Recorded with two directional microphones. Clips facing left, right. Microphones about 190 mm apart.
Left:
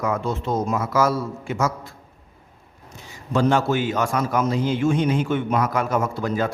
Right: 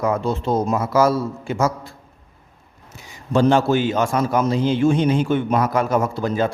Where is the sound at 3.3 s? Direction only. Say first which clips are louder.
Right 4 dB; 30° right (ahead or behind).